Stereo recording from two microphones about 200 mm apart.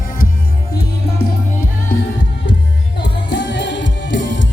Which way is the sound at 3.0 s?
60° left (ahead or behind).